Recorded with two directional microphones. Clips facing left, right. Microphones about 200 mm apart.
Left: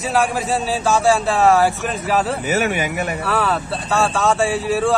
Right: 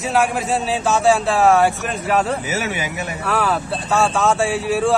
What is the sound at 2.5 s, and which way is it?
Speech, 55° left (ahead or behind).